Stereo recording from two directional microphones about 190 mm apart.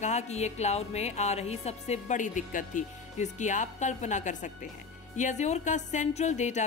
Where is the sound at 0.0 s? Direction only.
35° left (ahead or behind).